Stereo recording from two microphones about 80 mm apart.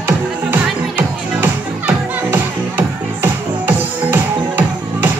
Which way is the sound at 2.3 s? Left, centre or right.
Right.